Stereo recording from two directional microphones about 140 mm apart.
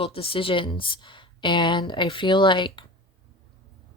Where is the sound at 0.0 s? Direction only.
40° left (ahead or behind).